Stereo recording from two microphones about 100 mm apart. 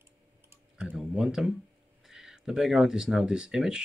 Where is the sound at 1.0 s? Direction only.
5° right (ahead or behind).